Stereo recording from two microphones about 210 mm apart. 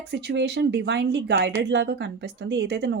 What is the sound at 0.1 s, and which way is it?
Speech, 50° right (ahead or behind).